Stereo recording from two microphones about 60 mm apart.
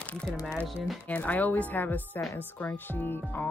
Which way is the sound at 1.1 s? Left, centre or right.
Left.